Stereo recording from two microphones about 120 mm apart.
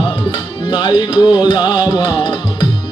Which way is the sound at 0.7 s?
40° left (ahead or behind).